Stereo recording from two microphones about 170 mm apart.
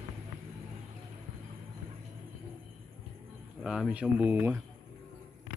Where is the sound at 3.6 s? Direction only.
5° right (ahead or behind).